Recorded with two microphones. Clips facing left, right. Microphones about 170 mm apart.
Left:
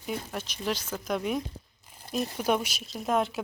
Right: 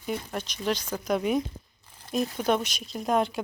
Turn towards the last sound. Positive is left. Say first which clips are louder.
# right 2 dB
turn(degrees=0)  # may be behind; listen again after turning